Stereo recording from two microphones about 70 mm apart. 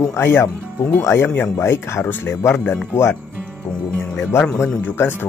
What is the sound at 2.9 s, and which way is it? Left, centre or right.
Speech, left.